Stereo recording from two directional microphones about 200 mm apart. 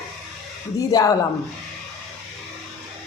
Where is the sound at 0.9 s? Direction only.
20° left (ahead or behind).